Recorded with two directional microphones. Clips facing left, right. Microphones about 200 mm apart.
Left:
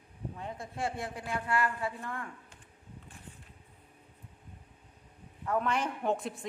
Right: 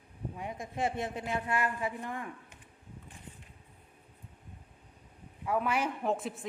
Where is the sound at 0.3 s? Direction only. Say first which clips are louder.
Right 3 dB; 15° right (ahead or behind).